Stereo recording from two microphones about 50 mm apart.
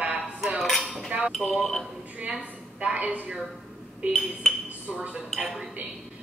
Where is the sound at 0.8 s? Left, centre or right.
Centre.